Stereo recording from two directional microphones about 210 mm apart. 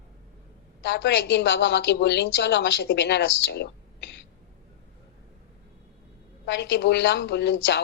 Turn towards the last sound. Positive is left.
turn(degrees=60)  # may be behind; listen again after turning